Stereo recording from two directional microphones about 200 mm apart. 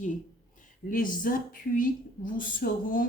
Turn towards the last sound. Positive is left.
turn(degrees=45)  # may be behind; listen again after turning